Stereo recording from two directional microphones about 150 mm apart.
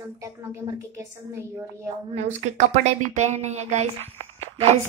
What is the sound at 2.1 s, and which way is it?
A woman's voice, 55° right (ahead or behind).